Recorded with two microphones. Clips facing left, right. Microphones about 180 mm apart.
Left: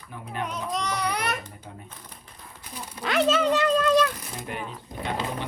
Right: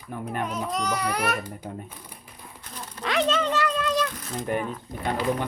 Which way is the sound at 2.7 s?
10° left (ahead or behind).